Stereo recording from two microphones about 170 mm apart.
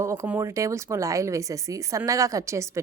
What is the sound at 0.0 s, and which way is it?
Speech, 15° right (ahead or behind).